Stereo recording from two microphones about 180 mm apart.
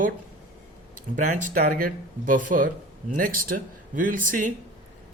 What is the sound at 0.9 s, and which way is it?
A woman's voice, 45° right (ahead or behind).